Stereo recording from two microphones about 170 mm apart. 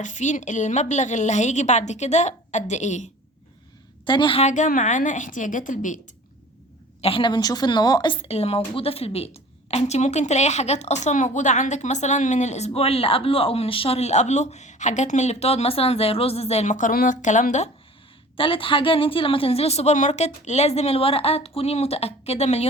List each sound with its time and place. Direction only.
0.0 s a woman's voice: 45° left (ahead or behind)
4.0 s a woman's voice: 25° left (ahead or behind); by 6.0 s 50° left (ahead or behind)
7.0 s a woman's voice: 30° left (ahead or behind)
18.3 s a woman's voice: 30° left (ahead or behind)